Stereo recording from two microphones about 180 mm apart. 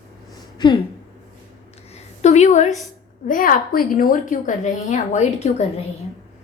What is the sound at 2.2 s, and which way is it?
A woman's voice, 40° left (ahead or behind).